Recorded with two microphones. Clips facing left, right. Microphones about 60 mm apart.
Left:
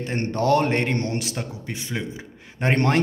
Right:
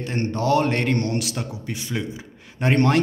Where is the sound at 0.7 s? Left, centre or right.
Left.